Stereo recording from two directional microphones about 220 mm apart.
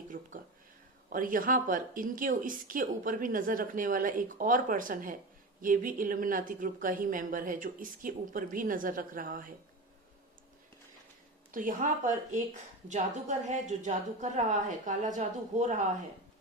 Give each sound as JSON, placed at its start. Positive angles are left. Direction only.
{"t": 0.1, "sound": "speech", "side_deg": -35}
{"t": 11.5, "sound": "speech", "side_deg": -35}